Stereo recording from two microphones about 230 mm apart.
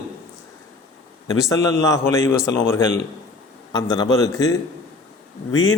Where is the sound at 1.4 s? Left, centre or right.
Centre.